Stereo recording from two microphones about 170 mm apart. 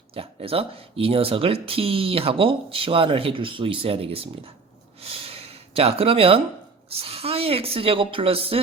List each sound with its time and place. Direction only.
0.1 s speech: 35° right (ahead or behind)
4.9 s gasp: 35° right (ahead or behind)
7.0 s speech: 35° right (ahead or behind)